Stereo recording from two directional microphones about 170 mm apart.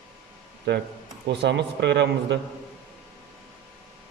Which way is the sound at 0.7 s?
90° right.